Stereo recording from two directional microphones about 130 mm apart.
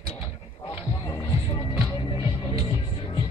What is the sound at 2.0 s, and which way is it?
Music, 40° left (ahead or behind).